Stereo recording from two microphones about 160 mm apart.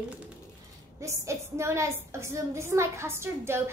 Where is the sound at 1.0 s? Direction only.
20° right (ahead or behind).